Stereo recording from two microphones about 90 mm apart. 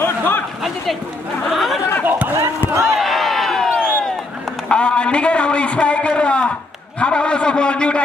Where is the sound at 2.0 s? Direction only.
20° right (ahead or behind).